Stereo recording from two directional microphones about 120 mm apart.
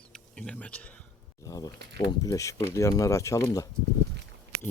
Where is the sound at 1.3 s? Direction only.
30° left (ahead or behind).